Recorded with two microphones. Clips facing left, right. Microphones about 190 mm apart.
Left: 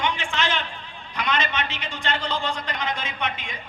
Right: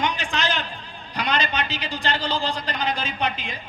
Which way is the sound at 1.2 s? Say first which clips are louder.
Right 1 dB; 35° right (ahead or behind).